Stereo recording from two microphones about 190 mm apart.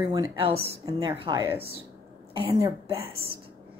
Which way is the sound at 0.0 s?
20° right (ahead or behind).